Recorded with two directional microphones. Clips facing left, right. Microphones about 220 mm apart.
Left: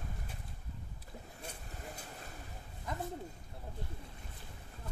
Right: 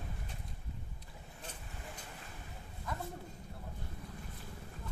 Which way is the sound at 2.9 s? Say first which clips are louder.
Left 1 dB; 20° left (ahead or behind).